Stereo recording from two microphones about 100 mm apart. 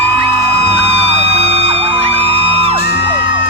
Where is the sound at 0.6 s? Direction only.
90° right.